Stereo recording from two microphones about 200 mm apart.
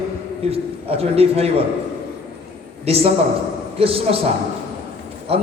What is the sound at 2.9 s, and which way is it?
A man's voice, 30° right (ahead or behind).